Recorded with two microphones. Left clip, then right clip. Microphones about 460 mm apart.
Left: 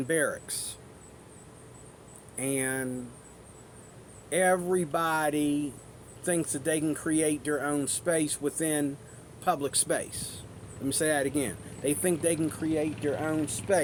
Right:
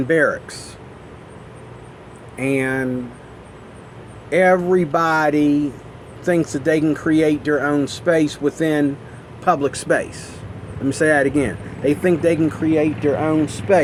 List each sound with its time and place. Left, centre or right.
0.1 s speech: left
2.4 s speech: left
4.3 s speech: left